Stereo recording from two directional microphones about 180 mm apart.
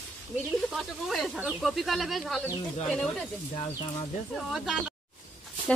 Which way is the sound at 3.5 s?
35° left (ahead or behind).